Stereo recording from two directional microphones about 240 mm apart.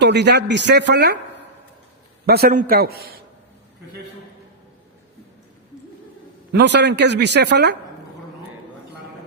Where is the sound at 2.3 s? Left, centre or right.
Right.